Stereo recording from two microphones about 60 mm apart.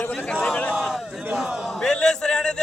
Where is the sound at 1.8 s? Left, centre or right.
Centre.